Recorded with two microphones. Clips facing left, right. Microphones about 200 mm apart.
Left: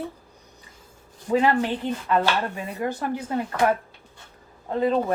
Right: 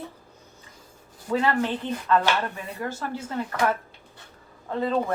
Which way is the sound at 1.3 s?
20° left (ahead or behind).